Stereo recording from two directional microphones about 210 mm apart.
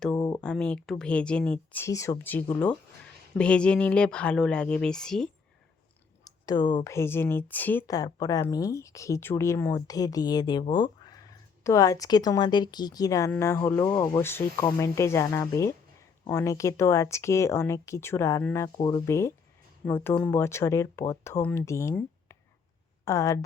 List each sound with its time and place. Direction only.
0.1 s a sound: 15° left (ahead or behind)
0.4 s speech: 5° left (ahead or behind)
6.2 s speech: 20° left (ahead or behind)